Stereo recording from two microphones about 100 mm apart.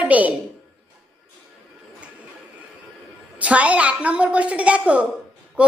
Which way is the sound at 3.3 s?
15° right (ahead or behind).